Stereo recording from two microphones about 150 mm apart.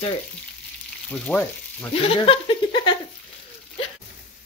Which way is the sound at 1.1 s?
5° left (ahead or behind).